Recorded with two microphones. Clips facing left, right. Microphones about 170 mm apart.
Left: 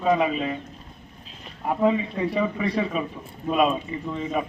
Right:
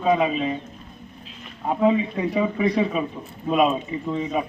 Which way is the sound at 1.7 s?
15° right (ahead or behind).